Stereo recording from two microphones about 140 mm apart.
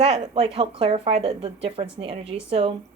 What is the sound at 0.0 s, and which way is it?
A woman's voice, 40° right (ahead or behind).